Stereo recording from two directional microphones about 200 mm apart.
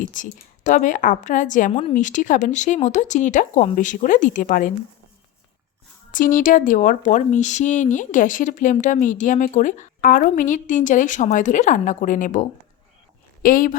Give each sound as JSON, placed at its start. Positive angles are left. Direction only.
{"t": 0.1, "sound": "speech", "side_deg": 40}
{"t": 6.1, "sound": "speech", "side_deg": 40}